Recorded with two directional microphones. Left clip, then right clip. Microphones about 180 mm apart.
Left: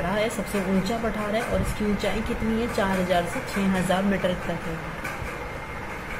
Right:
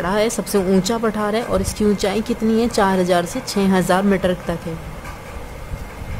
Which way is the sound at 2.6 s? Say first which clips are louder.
Right 9 dB; 45° right (ahead or behind).